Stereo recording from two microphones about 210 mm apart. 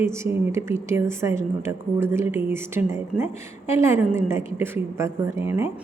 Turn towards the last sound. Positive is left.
turn(degrees=-10)  # may be behind; listen again after turning